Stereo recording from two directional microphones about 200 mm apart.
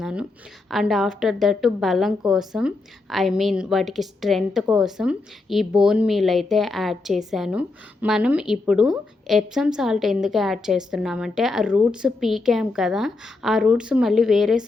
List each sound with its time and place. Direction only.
0.0 s a woman's voice: 5° right (ahead or behind)